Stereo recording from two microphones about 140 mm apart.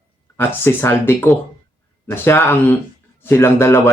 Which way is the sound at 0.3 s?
15° left (ahead or behind).